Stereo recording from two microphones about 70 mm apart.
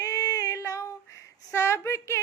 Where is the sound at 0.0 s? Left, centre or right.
Left.